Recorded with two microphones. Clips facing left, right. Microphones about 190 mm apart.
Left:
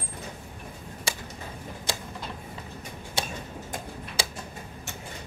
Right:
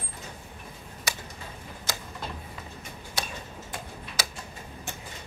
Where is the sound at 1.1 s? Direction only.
30° left (ahead or behind).